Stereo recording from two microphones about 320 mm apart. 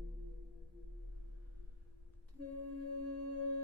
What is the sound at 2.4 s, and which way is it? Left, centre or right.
Music, right.